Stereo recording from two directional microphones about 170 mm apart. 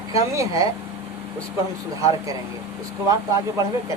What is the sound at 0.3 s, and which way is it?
Speech, 20° right (ahead or behind).